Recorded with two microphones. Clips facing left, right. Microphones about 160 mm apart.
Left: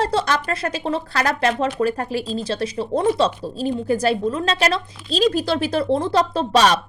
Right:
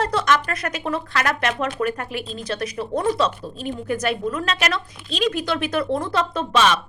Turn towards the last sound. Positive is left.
turn(degrees=35)  # may be behind; listen again after turning